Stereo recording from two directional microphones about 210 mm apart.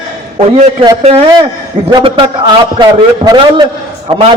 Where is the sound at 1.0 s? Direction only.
30° right (ahead or behind).